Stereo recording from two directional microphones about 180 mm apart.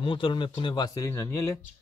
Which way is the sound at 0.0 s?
30° left (ahead or behind).